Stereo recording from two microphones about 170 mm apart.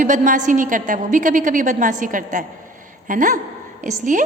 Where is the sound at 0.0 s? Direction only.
50° right (ahead or behind).